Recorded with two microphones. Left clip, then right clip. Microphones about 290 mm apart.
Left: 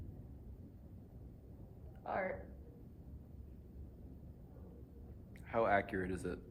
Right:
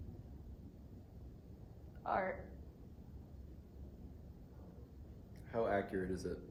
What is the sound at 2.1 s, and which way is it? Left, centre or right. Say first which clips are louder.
Speech: right 3 dB; centre.